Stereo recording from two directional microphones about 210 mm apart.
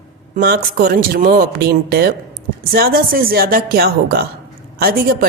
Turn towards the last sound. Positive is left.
turn(degrees=-45)  # may be behind; listen again after turning